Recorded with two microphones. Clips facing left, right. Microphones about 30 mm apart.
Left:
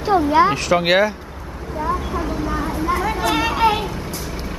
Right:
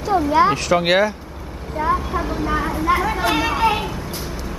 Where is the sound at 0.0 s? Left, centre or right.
Left.